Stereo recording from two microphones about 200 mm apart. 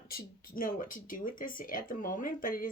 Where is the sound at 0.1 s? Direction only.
45° left (ahead or behind).